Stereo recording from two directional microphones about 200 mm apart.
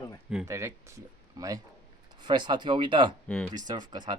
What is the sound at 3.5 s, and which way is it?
Speech, 20° right (ahead or behind).